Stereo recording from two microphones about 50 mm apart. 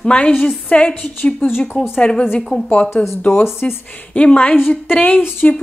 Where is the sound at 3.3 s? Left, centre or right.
Left.